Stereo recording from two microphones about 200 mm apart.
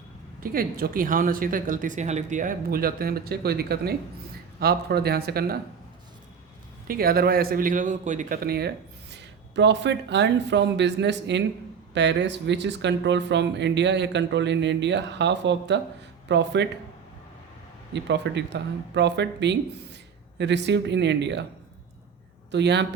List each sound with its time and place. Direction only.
0.3 s a man's voice: 45° right (ahead or behind)
6.8 s a man's voice: 50° right (ahead or behind)
17.9 s speech: 60° right (ahead or behind)
22.5 s speech: 60° right (ahead or behind)